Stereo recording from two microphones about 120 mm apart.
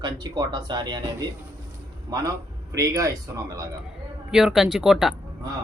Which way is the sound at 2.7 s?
30° right (ahead or behind).